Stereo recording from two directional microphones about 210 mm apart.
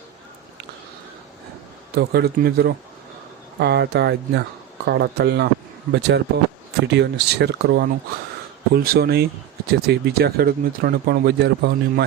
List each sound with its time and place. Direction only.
2.0 s speech: 50° right (ahead or behind)